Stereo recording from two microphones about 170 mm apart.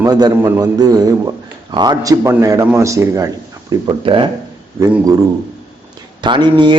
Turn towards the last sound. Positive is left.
turn(degrees=-25)  # may be behind; listen again after turning